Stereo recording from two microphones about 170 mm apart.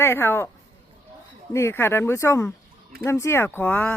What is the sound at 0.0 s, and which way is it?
Speech, 15° left (ahead or behind).